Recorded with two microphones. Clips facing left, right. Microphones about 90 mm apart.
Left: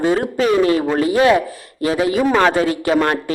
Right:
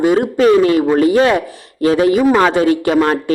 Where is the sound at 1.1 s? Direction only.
35° right (ahead or behind).